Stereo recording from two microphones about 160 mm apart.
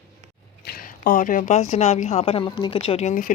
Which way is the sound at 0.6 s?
70° left (ahead or behind).